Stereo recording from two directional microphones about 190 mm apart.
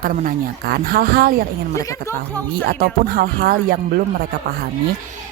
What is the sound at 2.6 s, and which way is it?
Speech, 50° right (ahead or behind).